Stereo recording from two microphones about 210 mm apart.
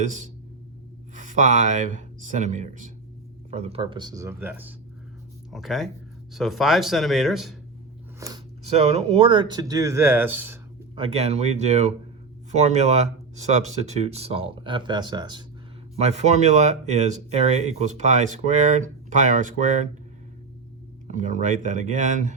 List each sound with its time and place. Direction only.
0.0 s speech: 35° right (ahead or behind); by 7.5 s centre (ahead or behind)
8.6 s speech: 30° right (ahead or behind); by 10.6 s 10° right (ahead or behind)
10.9 s speech: 30° right (ahead or behind)
16.0 s speech: 30° right (ahead or behind)
21.1 s speech: 35° right (ahead or behind)